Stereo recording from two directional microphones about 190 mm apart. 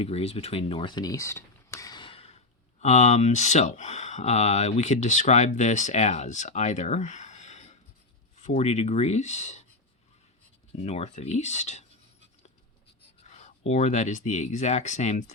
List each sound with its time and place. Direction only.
0.0 s speech: 30° left (ahead or behind)
10.7 s speech: 35° left (ahead or behind)
13.2 s speech: 35° left (ahead or behind)